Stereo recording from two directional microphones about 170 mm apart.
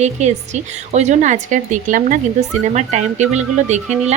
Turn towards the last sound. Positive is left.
turn(degrees=-40)  # may be behind; listen again after turning